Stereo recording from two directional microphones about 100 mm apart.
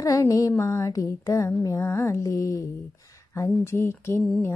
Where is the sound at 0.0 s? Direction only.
35° left (ahead or behind).